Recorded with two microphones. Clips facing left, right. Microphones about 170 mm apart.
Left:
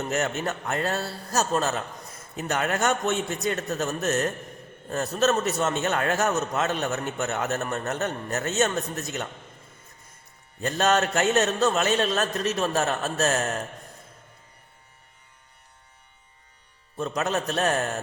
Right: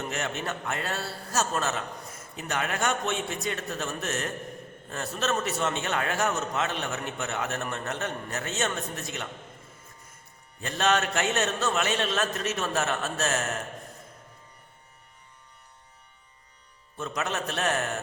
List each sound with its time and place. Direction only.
0.1 s a man's voice: 40° left (ahead or behind)
10.6 s a man's voice: 40° left (ahead or behind)
17.0 s a man's voice: 35° left (ahead or behind)